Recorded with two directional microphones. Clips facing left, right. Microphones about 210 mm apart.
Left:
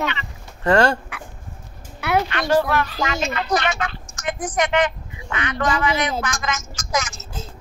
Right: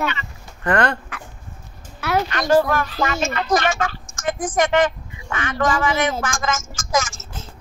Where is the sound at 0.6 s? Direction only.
30° left (ahead or behind).